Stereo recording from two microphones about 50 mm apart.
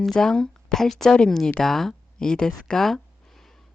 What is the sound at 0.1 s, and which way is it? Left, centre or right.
Speech, centre.